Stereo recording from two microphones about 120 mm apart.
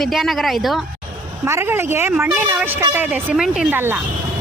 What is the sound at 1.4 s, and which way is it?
A woman's voice, 20° right (ahead or behind).